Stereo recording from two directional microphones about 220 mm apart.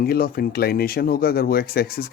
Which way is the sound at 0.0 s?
45° left (ahead or behind).